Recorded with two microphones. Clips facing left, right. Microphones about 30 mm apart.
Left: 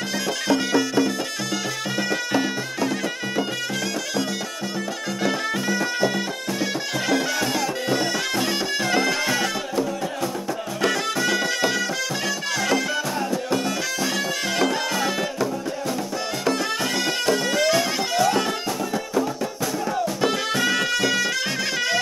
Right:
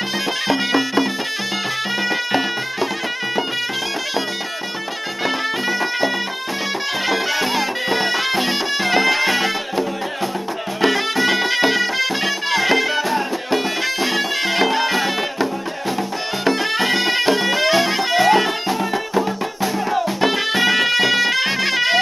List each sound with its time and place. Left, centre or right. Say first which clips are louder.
0.5 s music: right 1 dB; right
5.2 s music: right 3 dB; right
20.2 s music: right 4 dB; right